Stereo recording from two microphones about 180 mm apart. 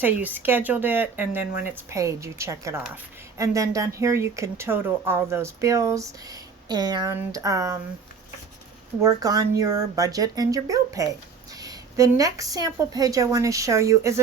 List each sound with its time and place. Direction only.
0.0 s speech: 10° right (ahead or behind)
9.0 s speech: 20° right (ahead or behind)